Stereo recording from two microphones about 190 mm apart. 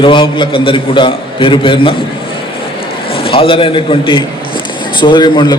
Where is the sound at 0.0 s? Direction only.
25° left (ahead or behind).